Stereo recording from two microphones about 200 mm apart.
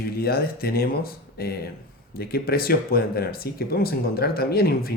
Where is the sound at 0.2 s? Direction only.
50° left (ahead or behind).